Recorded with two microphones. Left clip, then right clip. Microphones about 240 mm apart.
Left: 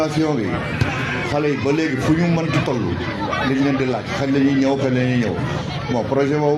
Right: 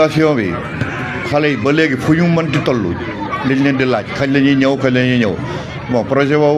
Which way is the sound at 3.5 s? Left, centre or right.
Right.